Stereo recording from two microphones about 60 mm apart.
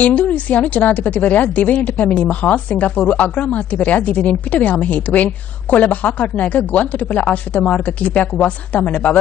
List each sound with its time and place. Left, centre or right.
0.0 s a woman's voice: left